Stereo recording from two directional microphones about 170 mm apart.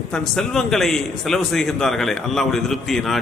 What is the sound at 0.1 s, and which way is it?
A man's voice, centre (ahead or behind).